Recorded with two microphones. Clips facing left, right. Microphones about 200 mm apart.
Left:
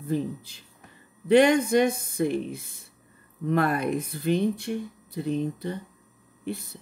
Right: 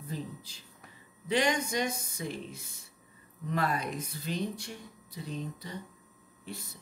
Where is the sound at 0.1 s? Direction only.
55° left (ahead or behind).